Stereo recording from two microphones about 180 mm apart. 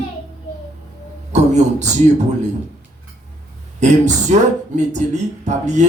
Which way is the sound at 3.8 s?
40° right (ahead or behind).